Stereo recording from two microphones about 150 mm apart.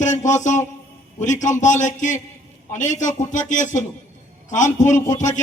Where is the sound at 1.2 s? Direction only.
55° left (ahead or behind).